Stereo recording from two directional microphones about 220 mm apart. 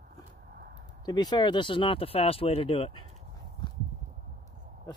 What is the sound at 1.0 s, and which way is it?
Speech, 20° left (ahead or behind).